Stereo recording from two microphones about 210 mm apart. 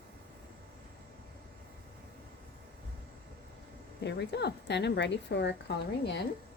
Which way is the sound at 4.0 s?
55° left (ahead or behind).